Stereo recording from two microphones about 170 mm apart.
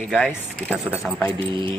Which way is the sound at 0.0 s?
5° left (ahead or behind).